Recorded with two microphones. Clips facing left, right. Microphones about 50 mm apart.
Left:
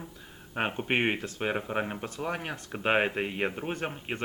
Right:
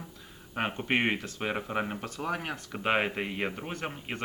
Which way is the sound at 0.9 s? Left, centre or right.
Left.